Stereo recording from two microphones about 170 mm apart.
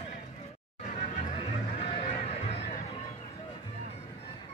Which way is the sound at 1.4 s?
30° left (ahead or behind).